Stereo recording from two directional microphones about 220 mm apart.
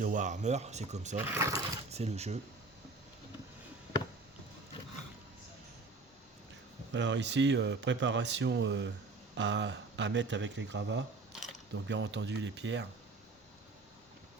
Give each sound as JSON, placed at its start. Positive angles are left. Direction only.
{"t": 0.0, "sound": "speech", "side_deg": -35}
{"t": 1.3, "sound": "speech", "side_deg": -15}
{"t": 1.9, "sound": "speech", "side_deg": -30}
{"t": 6.9, "sound": "speech", "side_deg": -55}
{"t": 11.3, "sound": "mechanisms", "side_deg": 0}
{"t": 11.7, "sound": "speech", "side_deg": -55}